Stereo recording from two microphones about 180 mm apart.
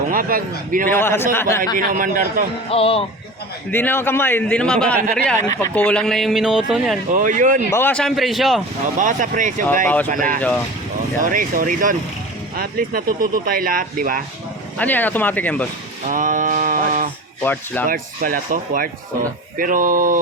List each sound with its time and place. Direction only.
0.1 s a man's voice: 50° right (ahead or behind)
0.9 s a man's voice: 15° left (ahead or behind)
1.7 s speech: 50° right (ahead or behind)
2.6 s speech: 30° left (ahead or behind)
3.7 s a man's voice: 10° left (ahead or behind)
7.1 s speech: 45° right (ahead or behind)
7.7 s speech: 10° left (ahead or behind)
9.0 s speech: 45° right (ahead or behind)
9.8 s a man's voice: 10° left (ahead or behind)
10.1 s speech: 50° right (ahead or behind)
14.8 s a man's voice: 10° left (ahead or behind)
16.0 s a sound: 45° right (ahead or behind)
17.4 s a man's voice: 10° left (ahead or behind)
17.8 s speech: 50° right (ahead or behind)